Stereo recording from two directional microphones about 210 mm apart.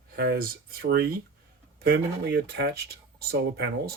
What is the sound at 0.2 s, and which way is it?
Speech, 45° right (ahead or behind).